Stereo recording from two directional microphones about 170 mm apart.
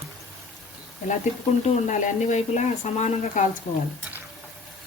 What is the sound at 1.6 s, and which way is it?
Speech, 45° left (ahead or behind).